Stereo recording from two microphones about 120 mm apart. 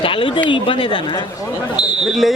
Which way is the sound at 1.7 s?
Centre (ahead or behind).